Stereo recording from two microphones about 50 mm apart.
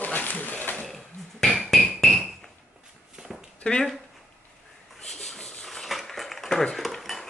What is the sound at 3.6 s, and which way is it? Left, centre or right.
Speech, centre.